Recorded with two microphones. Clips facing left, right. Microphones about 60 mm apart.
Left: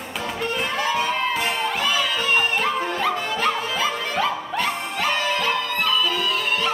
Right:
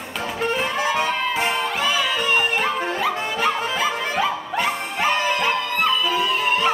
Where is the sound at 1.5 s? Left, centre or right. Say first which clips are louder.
Right 1 dB; centre.